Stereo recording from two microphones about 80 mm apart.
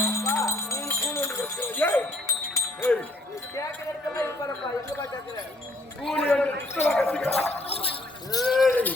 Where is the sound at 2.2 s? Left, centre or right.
Left.